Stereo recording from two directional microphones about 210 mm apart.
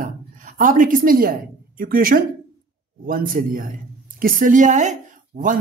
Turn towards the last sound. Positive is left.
turn(degrees=-35)  # may be behind; listen again after turning